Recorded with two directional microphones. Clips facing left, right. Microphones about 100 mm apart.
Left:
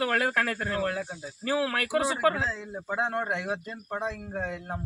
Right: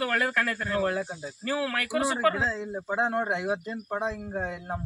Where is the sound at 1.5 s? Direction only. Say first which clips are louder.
Left 2 dB; 20° left (ahead or behind).